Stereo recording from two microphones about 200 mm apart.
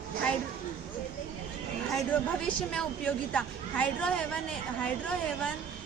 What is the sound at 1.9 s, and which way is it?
A woman's voice, 5° left (ahead or behind).